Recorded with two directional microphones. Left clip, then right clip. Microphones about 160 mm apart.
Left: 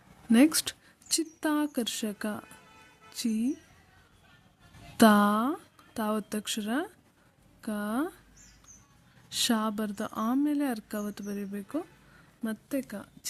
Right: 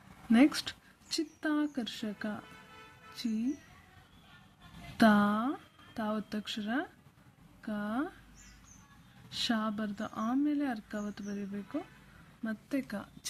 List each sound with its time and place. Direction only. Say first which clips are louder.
0.3 s a woman's voice: left 3 dB; 45° left (ahead or behind)
4.9 s a woman's voice: left 5 dB; 50° left (ahead or behind)
9.3 s a woman's voice: left 5 dB; 50° left (ahead or behind)
12.4 s a woman's voice: left 3 dB; 40° left (ahead or behind)